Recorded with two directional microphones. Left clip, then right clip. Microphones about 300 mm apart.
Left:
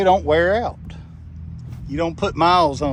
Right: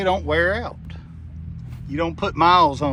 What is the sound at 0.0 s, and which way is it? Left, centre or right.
Speech, centre.